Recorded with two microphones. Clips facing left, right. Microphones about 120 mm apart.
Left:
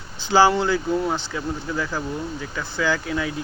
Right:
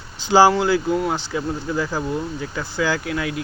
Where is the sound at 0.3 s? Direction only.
15° right (ahead or behind).